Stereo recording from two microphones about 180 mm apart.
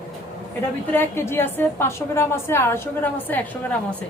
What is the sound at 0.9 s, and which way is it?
A woman's voice, 15° left (ahead or behind).